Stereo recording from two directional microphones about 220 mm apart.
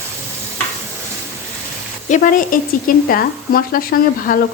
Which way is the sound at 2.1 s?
35° left (ahead or behind).